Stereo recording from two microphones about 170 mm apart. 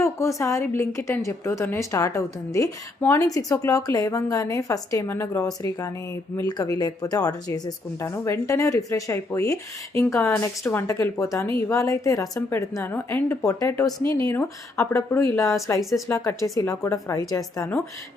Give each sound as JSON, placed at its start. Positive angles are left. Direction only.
{"t": 0.0, "sound": "a woman's voice", "side_deg": 20}
{"t": 14.0, "sound": "speech", "side_deg": -25}
{"t": 14.3, "sound": "a woman's voice", "side_deg": 15}
{"t": 15.8, "sound": "speech", "side_deg": 0}
{"t": 16.0, "sound": "a woman's voice", "side_deg": 15}